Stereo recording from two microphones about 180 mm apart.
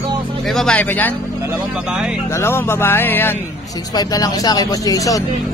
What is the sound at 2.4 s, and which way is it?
Speech, 15° left (ahead or behind).